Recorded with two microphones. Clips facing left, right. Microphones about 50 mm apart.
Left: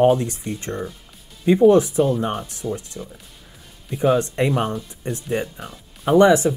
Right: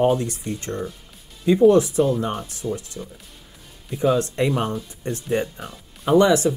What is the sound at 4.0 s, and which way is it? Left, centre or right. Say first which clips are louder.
Speech: left 1 dB; centre.